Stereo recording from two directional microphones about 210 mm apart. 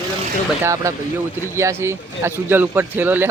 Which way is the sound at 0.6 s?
15° right (ahead or behind).